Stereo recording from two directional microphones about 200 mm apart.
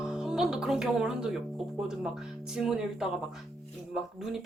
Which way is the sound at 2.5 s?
5° right (ahead or behind).